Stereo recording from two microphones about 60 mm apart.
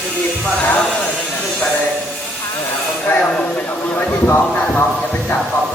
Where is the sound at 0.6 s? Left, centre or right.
Left.